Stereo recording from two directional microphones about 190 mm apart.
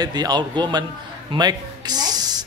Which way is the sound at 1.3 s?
20° right (ahead or behind).